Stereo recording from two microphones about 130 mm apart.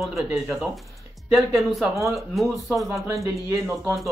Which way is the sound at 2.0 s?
Centre (ahead or behind).